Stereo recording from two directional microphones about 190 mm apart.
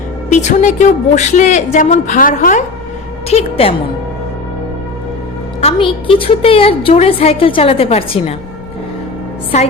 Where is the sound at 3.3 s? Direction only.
30° left (ahead or behind).